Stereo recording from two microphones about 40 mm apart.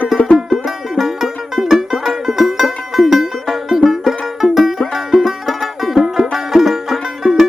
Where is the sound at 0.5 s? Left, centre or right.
Centre.